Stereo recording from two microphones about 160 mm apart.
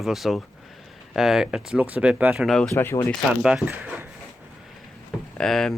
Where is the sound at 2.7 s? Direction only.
15° left (ahead or behind).